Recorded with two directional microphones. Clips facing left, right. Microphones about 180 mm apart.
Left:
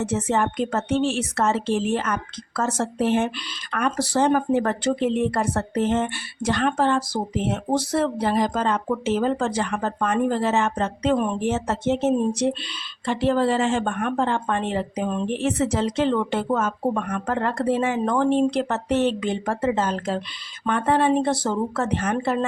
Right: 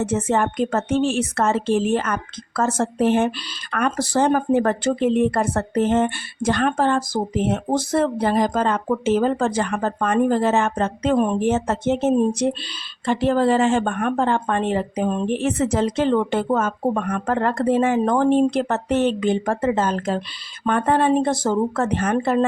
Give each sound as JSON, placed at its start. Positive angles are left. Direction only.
{"t": 0.0, "sound": "speech", "side_deg": -50}